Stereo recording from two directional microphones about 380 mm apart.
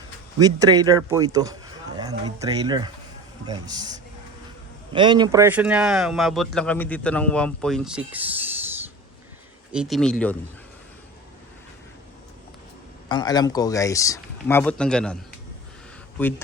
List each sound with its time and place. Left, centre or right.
0.3 s speech: centre
4.9 s speech: centre
9.7 s speech: centre
13.1 s speech: centre